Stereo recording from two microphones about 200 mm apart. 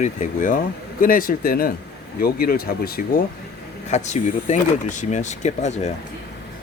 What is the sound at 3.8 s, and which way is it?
Speech, 35° left (ahead or behind).